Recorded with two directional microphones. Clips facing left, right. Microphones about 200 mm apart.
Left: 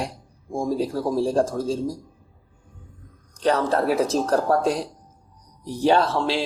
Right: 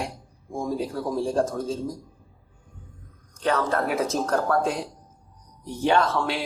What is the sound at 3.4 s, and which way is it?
Speech, 35° left (ahead or behind).